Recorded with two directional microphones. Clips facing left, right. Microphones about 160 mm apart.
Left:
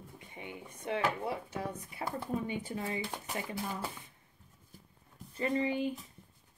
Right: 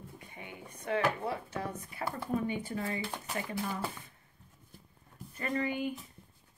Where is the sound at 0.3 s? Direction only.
25° left (ahead or behind).